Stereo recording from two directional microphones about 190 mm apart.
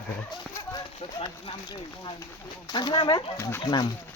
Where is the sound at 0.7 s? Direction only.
25° left (ahead or behind).